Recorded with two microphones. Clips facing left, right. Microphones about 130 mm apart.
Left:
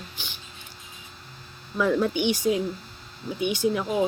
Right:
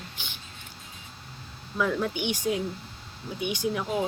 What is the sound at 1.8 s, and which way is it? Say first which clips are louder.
Speech: left 4 dB; centre (ahead or behind).